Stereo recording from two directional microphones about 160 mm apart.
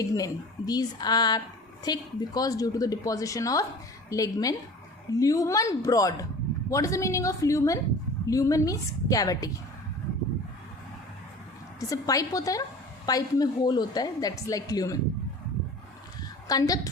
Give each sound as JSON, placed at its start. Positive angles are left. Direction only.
{"t": 0.1, "sound": "a woman's voice", "side_deg": 25}
{"t": 11.8, "sound": "a woman's voice", "side_deg": 20}
{"t": 16.5, "sound": "a woman's voice", "side_deg": 20}